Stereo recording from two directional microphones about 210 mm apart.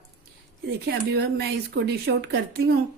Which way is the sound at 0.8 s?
50° right (ahead or behind).